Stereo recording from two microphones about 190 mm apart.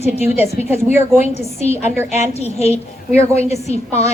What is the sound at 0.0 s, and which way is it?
A woman's voice, 35° left (ahead or behind).